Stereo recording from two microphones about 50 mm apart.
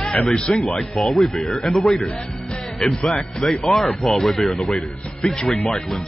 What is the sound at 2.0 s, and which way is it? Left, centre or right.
Speech, left.